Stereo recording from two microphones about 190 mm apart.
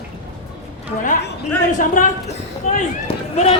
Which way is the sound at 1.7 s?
45° left (ahead or behind).